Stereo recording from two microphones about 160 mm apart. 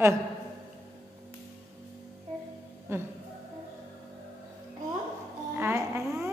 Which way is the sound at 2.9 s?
15° right (ahead or behind).